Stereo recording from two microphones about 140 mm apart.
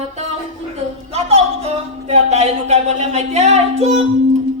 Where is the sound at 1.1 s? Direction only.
45° right (ahead or behind).